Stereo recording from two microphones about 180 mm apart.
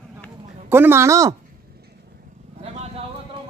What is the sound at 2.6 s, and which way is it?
Vehicle, 35° right (ahead or behind).